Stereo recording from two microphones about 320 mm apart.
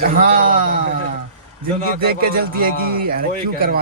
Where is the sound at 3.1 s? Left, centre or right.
Right.